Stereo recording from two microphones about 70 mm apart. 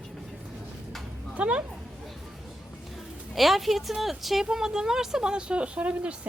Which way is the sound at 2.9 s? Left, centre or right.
Centre.